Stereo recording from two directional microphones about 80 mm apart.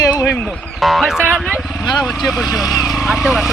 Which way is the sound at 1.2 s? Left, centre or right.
Centre.